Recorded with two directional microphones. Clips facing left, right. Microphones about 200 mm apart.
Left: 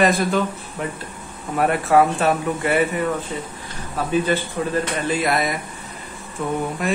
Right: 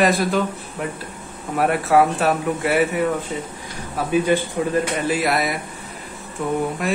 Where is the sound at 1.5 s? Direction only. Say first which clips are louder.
Even; 5° right (ahead or behind).